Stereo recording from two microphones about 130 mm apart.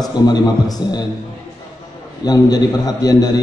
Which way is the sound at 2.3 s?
30° left (ahead or behind).